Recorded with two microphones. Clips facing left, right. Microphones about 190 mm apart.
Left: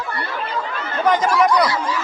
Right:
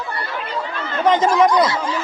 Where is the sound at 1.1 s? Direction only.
20° right (ahead or behind).